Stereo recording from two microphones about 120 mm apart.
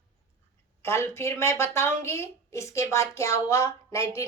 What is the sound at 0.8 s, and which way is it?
A woman's voice, 20° left (ahead or behind).